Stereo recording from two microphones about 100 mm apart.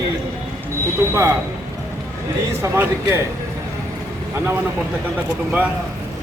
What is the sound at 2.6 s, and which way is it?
Speech, 25° right (ahead or behind).